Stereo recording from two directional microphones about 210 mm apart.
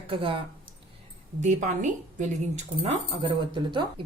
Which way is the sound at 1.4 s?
35° right (ahead or behind).